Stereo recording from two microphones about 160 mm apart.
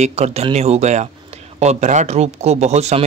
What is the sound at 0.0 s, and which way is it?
Speech, 40° right (ahead or behind).